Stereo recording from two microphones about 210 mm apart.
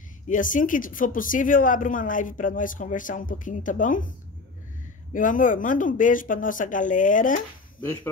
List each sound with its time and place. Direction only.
0.3 s speech: 40° left (ahead or behind)
5.1 s speech: 40° left (ahead or behind)
7.8 s speech: 10° left (ahead or behind)